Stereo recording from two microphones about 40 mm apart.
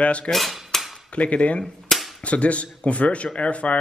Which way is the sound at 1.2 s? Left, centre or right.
Left.